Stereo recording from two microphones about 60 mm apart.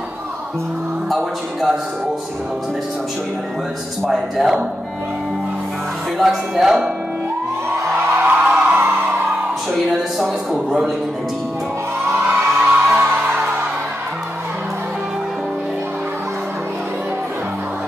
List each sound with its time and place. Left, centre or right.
1.1 s speech: centre
4.1 s speech: centre
6.1 s speech: centre
8.3 s music: right
9.7 s speech: centre
10.5 s speech: centre
12.3 s music: right